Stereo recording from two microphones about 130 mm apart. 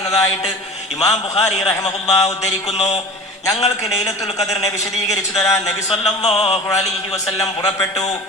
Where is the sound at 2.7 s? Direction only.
55° left (ahead or behind).